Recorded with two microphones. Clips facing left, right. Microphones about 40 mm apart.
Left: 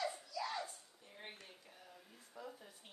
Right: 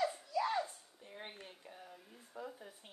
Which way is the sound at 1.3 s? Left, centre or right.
Centre.